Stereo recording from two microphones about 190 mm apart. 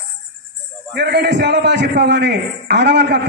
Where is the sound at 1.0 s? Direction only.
65° right (ahead or behind).